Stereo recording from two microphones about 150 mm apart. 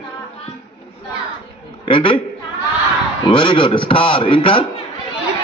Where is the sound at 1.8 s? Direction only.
35° left (ahead or behind).